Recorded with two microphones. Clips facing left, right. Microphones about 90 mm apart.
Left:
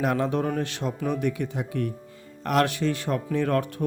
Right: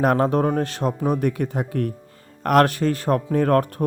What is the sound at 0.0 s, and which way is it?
Speech, 45° right (ahead or behind).